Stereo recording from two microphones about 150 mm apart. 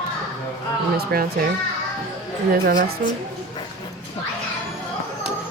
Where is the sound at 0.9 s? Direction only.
90° right.